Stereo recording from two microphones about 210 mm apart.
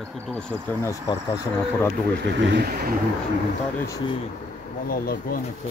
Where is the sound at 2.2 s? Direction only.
55° right (ahead or behind).